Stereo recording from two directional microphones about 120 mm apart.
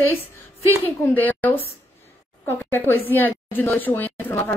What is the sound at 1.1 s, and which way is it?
A woman's voice, 15° left (ahead or behind).